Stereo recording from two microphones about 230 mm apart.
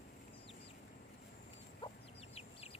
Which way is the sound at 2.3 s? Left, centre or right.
Left.